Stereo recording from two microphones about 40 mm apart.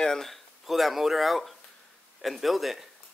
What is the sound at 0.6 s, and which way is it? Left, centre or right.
Speech, centre.